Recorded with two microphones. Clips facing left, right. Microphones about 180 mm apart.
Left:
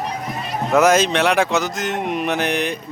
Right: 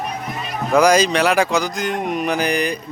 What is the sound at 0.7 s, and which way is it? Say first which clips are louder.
Speech: right 1 dB; centre (ahead or behind).